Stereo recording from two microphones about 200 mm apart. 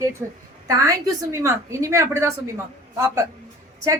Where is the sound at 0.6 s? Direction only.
15° right (ahead or behind).